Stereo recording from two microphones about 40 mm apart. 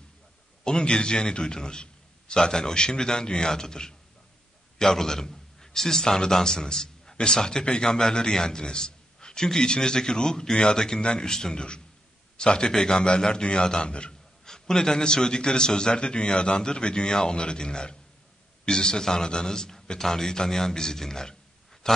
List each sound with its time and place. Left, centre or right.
0.7 s a man's voice: left